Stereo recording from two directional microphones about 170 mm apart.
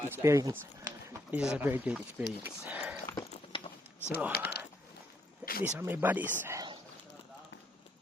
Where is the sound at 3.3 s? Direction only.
35° left (ahead or behind).